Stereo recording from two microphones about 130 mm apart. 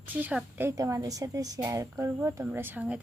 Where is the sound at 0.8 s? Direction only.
25° right (ahead or behind).